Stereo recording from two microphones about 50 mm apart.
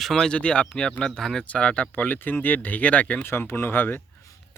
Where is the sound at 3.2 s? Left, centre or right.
Left.